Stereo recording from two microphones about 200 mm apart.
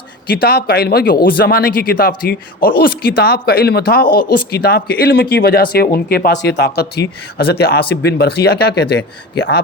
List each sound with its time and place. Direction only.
0.3 s a man's voice: 50° left (ahead or behind)